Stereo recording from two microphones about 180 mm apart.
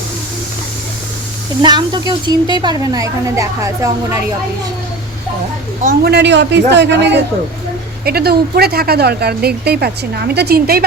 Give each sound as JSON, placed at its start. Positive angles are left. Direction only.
{"t": 1.6, "sound": "a woman's voice", "side_deg": -25}
{"t": 5.8, "sound": "speech", "side_deg": -55}
{"t": 8.0, "sound": "speech", "side_deg": -60}